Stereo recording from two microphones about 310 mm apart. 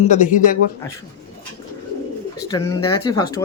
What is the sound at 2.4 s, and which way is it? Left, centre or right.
Speech, centre.